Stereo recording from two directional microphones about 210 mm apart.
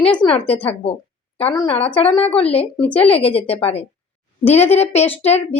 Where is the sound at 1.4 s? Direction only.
25° left (ahead or behind).